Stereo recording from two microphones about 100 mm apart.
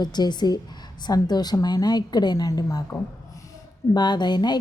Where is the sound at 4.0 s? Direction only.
45° left (ahead or behind).